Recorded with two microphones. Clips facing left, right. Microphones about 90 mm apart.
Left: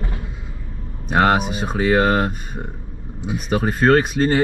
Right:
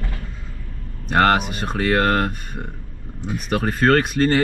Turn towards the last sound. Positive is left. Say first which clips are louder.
# left 1 dB
turn(degrees=5)  # may be behind; listen again after turning